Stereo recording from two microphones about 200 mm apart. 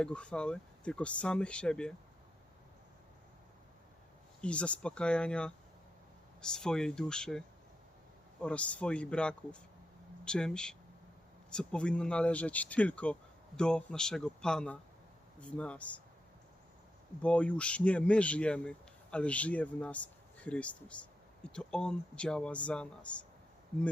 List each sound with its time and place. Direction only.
0.0 s speech: 5° left (ahead or behind)
4.4 s speech: 5° left (ahead or behind)
17.2 s speech: 5° left (ahead or behind)